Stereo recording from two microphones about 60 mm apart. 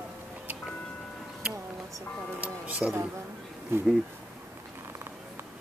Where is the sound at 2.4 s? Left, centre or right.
Right.